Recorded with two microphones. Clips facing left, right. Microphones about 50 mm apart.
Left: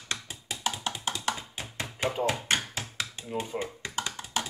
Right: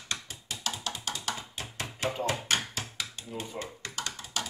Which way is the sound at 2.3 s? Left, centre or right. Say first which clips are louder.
Left 1 dB; left.